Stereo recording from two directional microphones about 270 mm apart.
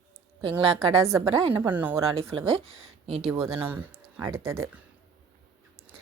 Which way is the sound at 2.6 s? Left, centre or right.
Right.